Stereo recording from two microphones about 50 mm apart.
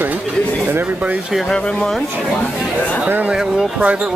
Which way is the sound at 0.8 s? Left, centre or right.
Right.